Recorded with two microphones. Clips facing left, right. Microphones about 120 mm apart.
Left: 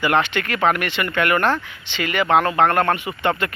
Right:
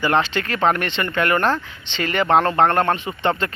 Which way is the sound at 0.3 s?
30° right (ahead or behind).